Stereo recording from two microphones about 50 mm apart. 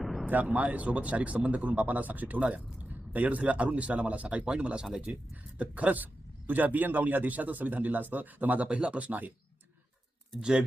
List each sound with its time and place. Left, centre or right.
0.0 s a sound: centre
0.5 s a man's voice: right
5.5 s a man's voice: right